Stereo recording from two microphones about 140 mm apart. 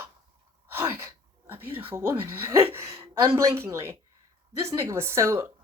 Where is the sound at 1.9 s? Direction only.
15° right (ahead or behind).